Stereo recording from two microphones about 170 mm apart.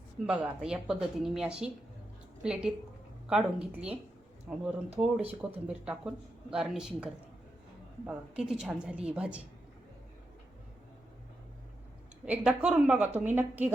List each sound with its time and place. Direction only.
0.3 s a woman's voice: 5° right (ahead or behind)
12.2 s a woman's voice: 5° right (ahead or behind)